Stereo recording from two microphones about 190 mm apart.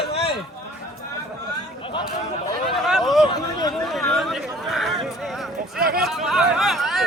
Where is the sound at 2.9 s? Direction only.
Centre (ahead or behind).